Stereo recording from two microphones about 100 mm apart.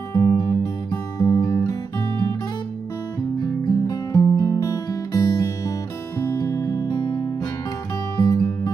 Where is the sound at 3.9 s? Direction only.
40° left (ahead or behind).